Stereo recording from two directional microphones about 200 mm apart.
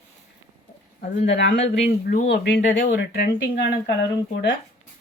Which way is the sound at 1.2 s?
60° left (ahead or behind).